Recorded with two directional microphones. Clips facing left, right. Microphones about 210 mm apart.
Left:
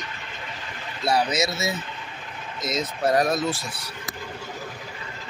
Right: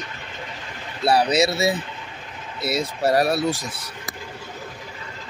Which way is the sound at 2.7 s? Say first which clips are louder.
Right 2 dB; 10° right (ahead or behind).